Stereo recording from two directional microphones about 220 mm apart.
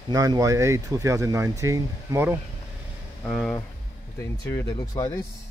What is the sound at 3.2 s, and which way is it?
Speech, centre (ahead or behind).